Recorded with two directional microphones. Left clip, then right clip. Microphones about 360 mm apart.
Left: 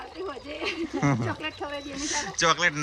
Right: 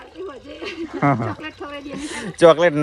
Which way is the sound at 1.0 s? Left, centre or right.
Centre.